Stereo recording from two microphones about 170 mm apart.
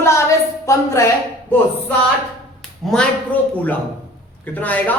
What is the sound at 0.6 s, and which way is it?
Speech, 15° left (ahead or behind).